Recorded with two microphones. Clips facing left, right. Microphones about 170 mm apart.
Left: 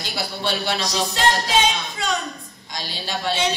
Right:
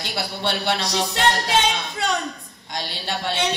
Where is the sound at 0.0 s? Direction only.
60° right (ahead or behind).